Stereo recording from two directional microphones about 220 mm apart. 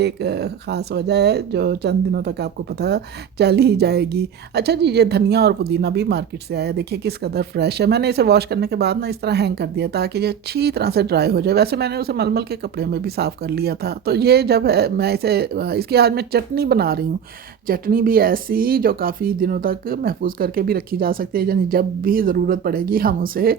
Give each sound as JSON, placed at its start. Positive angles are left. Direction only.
{"t": 0.0, "sound": "speech", "side_deg": -50}